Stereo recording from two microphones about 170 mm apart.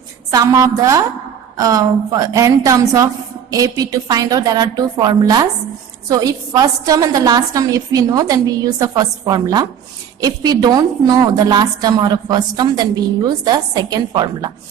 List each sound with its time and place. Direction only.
0.3 s a woman's voice: 20° right (ahead or behind)